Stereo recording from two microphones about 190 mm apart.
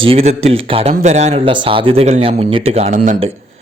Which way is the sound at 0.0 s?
30° right (ahead or behind).